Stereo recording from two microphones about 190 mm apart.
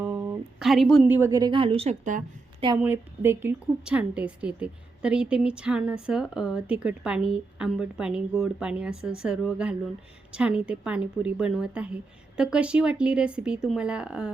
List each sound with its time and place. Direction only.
0.0 s a sound: 5° right (ahead or behind)
1.0 s a woman's voice: 10° right (ahead or behind); by 2.2 s 40° right (ahead or behind)
2.8 s speech: 10° right (ahead or behind)